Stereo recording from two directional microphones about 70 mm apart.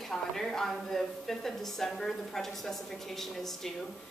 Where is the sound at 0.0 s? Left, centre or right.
Centre.